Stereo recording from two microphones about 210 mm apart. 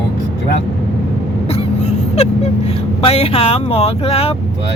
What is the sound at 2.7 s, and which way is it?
Speech, 30° left (ahead or behind).